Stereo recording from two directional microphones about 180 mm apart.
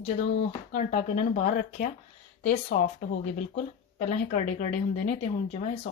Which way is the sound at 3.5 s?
40° left (ahead or behind).